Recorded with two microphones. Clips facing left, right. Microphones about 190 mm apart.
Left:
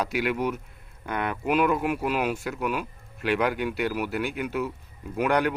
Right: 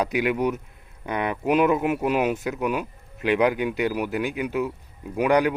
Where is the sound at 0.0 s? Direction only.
15° right (ahead or behind).